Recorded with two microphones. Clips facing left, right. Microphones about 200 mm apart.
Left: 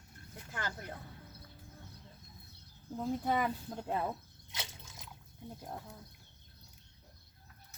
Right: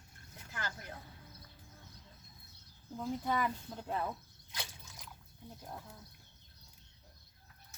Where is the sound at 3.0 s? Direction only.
25° left (ahead or behind).